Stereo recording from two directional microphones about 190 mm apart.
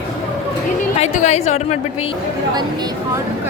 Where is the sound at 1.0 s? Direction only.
35° left (ahead or behind).